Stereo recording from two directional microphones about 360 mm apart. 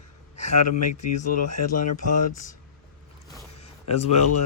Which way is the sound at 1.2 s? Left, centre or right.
Left.